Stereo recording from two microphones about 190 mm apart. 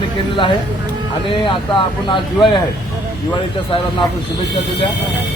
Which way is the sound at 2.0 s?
25° left (ahead or behind).